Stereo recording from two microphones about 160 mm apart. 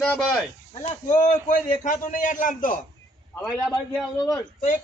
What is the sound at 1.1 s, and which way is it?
A man's voice, 50° left (ahead or behind).